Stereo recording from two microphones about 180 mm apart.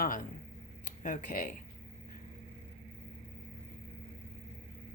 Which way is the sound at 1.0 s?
45° left (ahead or behind).